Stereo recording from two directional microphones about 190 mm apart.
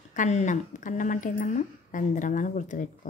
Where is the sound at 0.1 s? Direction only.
40° left (ahead or behind).